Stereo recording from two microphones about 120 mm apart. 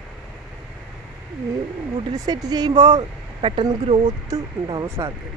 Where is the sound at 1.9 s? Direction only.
35° right (ahead or behind).